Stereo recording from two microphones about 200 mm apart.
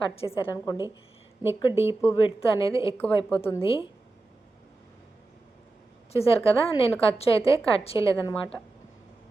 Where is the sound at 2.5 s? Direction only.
25° left (ahead or behind).